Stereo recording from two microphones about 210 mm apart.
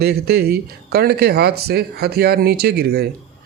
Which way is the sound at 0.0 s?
50° right (ahead or behind).